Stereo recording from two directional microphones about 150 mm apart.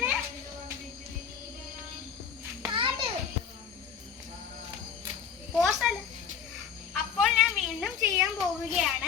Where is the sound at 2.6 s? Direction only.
35° right (ahead or behind).